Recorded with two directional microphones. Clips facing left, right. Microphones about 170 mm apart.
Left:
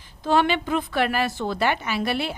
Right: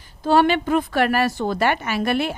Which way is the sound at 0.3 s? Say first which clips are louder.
Right 4 dB; 45° right (ahead or behind).